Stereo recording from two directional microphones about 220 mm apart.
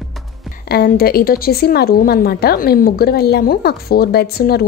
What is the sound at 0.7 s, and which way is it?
A woman's voice, 45° left (ahead or behind).